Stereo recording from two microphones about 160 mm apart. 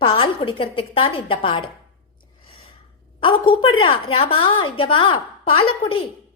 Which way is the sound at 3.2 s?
30° left (ahead or behind).